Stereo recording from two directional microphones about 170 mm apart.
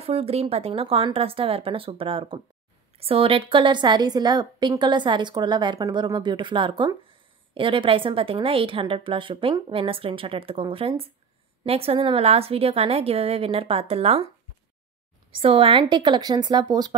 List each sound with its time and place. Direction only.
0.0 s a woman's voice: 35° right (ahead or behind)
15.3 s a woman's voice: 30° right (ahead or behind)